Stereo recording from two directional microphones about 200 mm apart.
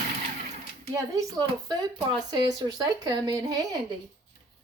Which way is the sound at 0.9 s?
20° right (ahead or behind).